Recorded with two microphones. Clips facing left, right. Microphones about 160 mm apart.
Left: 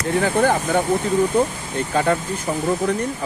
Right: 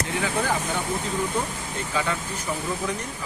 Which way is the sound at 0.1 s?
50° left (ahead or behind).